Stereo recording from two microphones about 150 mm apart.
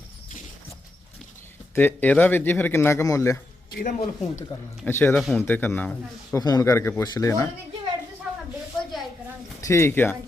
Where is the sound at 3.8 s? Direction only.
90° left.